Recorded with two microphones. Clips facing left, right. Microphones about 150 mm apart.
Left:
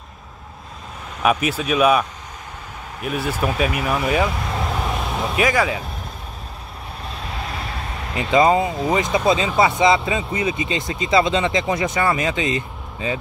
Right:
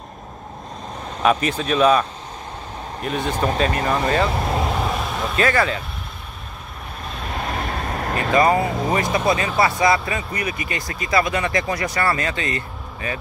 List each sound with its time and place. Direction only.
1.2 s speech: 5° left (ahead or behind)
7.3 s vehicle: 45° right (ahead or behind)
8.3 s speech: 20° left (ahead or behind)